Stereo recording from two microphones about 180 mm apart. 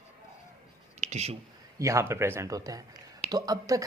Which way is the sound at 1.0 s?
40° right (ahead or behind).